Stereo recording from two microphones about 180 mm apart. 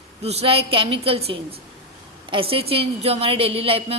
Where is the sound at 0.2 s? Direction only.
35° right (ahead or behind).